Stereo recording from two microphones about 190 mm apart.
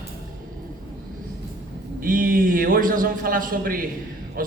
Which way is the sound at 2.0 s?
45° right (ahead or behind).